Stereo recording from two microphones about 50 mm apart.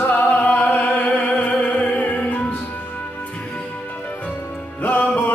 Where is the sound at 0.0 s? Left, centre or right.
Left.